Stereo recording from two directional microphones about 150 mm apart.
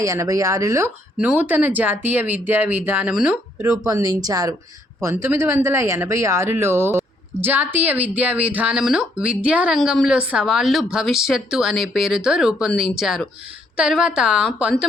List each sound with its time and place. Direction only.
0.0 s speech: 20° right (ahead or behind)
1.2 s speech: 10° right (ahead or behind)
3.6 s a woman's voice: 20° right (ahead or behind)